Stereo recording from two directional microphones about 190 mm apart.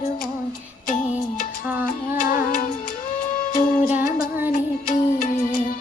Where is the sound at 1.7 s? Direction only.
10° right (ahead or behind).